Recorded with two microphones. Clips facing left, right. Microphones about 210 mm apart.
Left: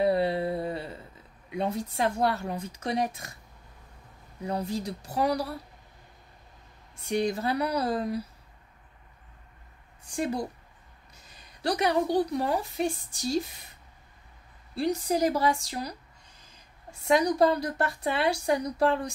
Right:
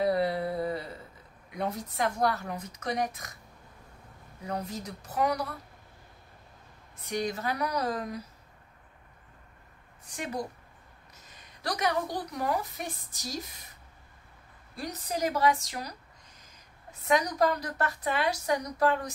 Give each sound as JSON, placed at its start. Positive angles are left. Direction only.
{"t": 0.0, "sound": "a sound", "side_deg": 30}
{"t": 1.6, "sound": "a woman's voice", "side_deg": 25}
{"t": 4.5, "sound": "speech", "side_deg": 30}
{"t": 7.0, "sound": "speech", "side_deg": 30}
{"t": 10.0, "sound": "a woman's voice", "side_deg": 30}
{"t": 11.6, "sound": "a woman's voice", "side_deg": 30}
{"t": 14.8, "sound": "speech", "side_deg": 30}